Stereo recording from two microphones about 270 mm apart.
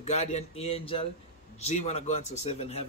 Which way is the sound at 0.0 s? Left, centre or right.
Left.